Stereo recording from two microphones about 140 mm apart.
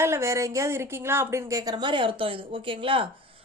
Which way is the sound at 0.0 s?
20° right (ahead or behind).